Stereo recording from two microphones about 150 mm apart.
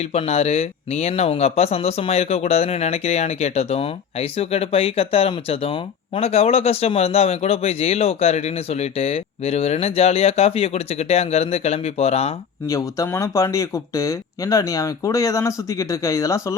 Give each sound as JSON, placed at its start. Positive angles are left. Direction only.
{"t": 0.0, "sound": "speech", "side_deg": 45}
{"t": 12.6, "sound": "speech", "side_deg": 20}